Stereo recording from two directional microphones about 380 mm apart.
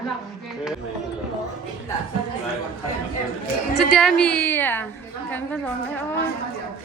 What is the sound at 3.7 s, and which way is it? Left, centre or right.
A woman's voice, centre.